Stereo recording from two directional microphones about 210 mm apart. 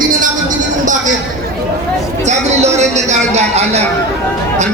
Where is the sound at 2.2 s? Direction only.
35° right (ahead or behind).